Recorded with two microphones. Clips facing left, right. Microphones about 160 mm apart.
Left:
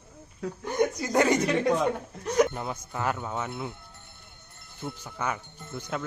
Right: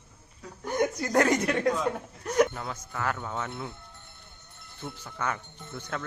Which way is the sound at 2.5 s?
20° left (ahead or behind).